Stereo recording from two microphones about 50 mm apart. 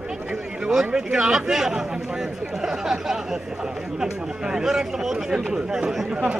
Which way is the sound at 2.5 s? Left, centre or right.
Centre.